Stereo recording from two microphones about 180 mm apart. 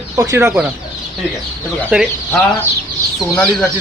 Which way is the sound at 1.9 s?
5° right (ahead or behind).